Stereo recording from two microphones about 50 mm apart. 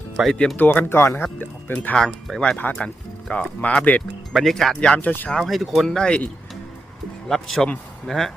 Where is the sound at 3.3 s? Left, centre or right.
Left.